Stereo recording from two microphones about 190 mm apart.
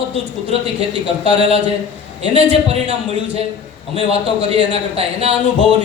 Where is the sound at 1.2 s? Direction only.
30° right (ahead or behind).